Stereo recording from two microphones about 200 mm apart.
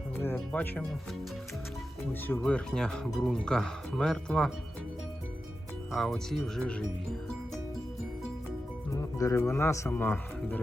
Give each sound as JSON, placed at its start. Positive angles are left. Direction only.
{"t": 0.3, "sound": "speech", "side_deg": 10}
{"t": 2.2, "sound": "speech", "side_deg": 5}
{"t": 5.9, "sound": "speech", "side_deg": 0}
{"t": 8.9, "sound": "speech", "side_deg": 15}